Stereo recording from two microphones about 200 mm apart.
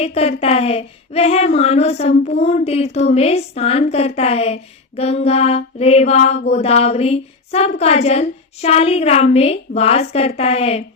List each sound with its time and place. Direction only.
0.0 s speech: 30° left (ahead or behind)